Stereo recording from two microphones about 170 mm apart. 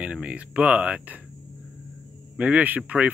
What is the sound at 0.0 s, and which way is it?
Speech, 5° right (ahead or behind).